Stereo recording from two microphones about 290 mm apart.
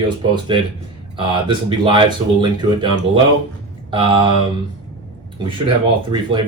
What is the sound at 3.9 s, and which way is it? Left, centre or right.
Speech, centre.